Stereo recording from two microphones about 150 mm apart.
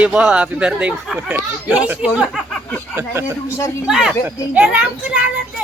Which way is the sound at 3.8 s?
5° right (ahead or behind).